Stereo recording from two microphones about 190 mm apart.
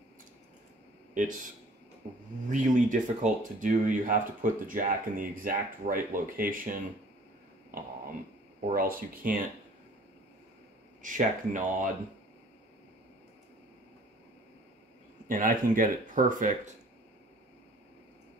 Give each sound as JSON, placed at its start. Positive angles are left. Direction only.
{"t": 1.1, "sound": "speech", "side_deg": -45}
{"t": 2.5, "sound": "speech", "side_deg": -45}
{"t": 7.7, "sound": "a sound", "side_deg": -45}
{"t": 8.7, "sound": "speech", "side_deg": -45}
{"t": 11.0, "sound": "speech", "side_deg": -45}
{"t": 15.2, "sound": "speech", "side_deg": -45}